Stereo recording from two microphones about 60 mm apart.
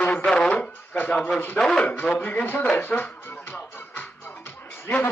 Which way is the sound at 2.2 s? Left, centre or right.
Left.